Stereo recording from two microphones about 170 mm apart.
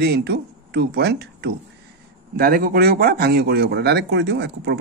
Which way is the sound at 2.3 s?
60° right (ahead or behind).